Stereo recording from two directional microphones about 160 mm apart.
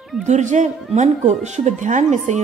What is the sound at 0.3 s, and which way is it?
A woman's voice, 50° right (ahead or behind).